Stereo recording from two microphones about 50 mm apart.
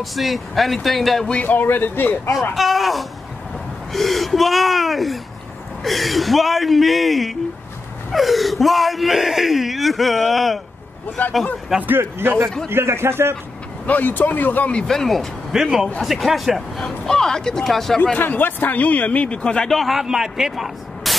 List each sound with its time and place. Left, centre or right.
0.0 s speech: centre
1.4 s a man's voice: left
2.5 s speech: centre
11.2 s a man's voice: left
11.7 s speech: centre
12.2 s a man's voice: right
13.8 s a man's voice: left
14.9 s speech: centre
15.5 s speech: centre
18.2 s a man's voice: left; by 19.7 s centre
19.7 s speech: centre